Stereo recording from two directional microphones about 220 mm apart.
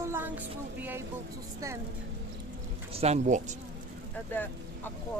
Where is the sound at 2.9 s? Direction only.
30° right (ahead or behind).